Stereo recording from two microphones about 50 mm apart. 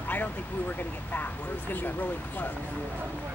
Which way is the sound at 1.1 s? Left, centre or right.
Left.